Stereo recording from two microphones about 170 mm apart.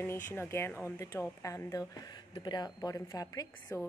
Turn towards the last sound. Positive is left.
turn(degrees=20)  # may be behind; listen again after turning